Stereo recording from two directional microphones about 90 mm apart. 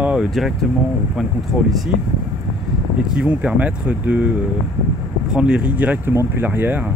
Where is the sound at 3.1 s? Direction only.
15° right (ahead or behind).